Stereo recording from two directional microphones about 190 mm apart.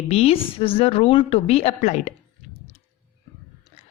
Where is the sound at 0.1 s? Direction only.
30° left (ahead or behind).